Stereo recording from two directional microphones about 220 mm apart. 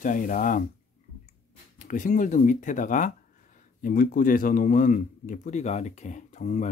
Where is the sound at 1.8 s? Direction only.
35° left (ahead or behind).